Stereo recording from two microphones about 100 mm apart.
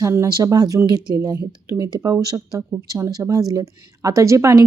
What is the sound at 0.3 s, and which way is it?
Speech, 40° right (ahead or behind).